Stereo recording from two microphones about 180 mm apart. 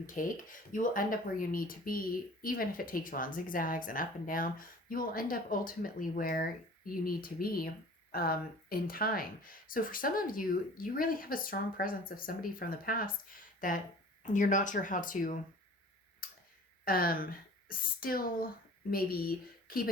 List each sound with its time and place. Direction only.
0.0 s speech: 50° left (ahead or behind)
16.2 s tick-tock: 55° left (ahead or behind)
16.8 s speech: 55° left (ahead or behind)